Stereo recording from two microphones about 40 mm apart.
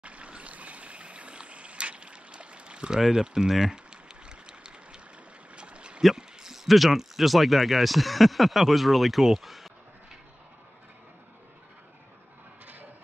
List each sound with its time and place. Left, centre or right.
0.0 s stream: right
3.0 s speech: centre
3.7 s a sound: right
6.1 s speech: centre